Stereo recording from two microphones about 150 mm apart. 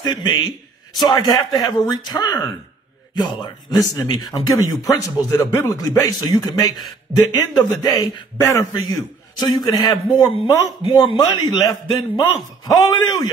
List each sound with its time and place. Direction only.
0.0 s a man's voice: 30° left (ahead or behind)